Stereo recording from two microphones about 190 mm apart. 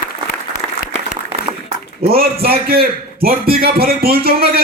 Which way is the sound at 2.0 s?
55° right (ahead or behind).